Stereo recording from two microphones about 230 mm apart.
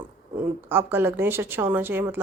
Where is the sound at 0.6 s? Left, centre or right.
Centre.